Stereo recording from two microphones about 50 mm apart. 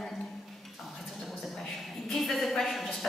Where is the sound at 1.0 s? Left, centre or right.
Centre.